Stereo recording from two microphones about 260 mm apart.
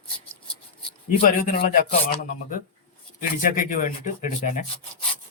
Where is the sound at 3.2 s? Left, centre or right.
Left.